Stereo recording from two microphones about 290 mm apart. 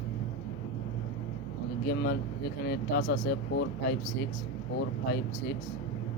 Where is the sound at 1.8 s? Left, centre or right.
Left.